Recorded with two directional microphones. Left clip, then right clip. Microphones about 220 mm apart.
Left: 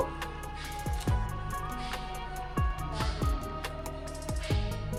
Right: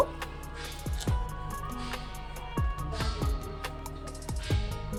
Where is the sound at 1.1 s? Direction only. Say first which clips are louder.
Left 1 dB; centre (ahead or behind).